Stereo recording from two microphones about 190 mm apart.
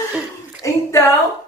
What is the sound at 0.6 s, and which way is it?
Speech, 15° left (ahead or behind).